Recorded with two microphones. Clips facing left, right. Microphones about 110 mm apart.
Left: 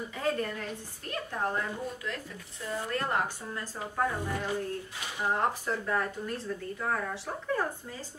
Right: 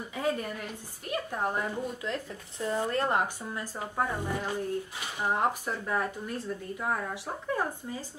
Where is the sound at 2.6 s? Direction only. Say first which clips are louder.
Right 4 dB; 25° right (ahead or behind).